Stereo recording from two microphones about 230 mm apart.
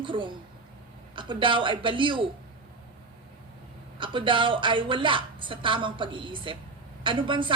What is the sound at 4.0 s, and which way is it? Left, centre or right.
A woman's voice, right.